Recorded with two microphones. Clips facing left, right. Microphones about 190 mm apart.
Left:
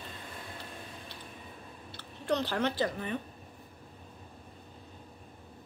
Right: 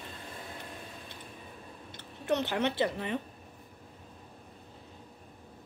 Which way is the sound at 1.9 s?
20° right (ahead or behind).